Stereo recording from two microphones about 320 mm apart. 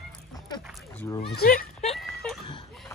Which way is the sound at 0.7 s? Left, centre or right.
Centre.